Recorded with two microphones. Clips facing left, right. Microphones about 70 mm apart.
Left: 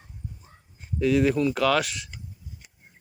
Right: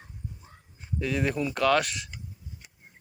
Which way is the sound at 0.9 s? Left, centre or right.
Centre.